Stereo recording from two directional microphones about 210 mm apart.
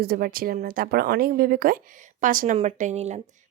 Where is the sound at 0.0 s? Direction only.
45° right (ahead or behind).